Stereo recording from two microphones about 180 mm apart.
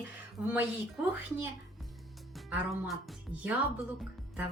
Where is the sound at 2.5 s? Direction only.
Centre (ahead or behind).